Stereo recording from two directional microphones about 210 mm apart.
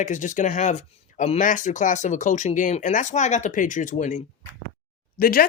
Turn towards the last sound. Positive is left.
turn(degrees=45)  # may be behind; listen again after turning